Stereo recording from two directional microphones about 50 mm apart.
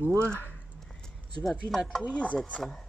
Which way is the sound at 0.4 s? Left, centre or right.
Left.